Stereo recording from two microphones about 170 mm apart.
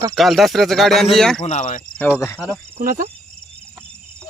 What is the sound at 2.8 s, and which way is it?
Speech, 55° right (ahead or behind).